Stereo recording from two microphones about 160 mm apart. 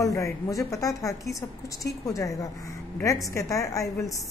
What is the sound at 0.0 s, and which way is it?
A woman's voice, 20° left (ahead or behind).